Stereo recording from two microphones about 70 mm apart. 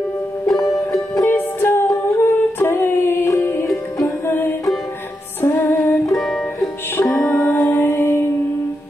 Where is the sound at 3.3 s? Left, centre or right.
Left.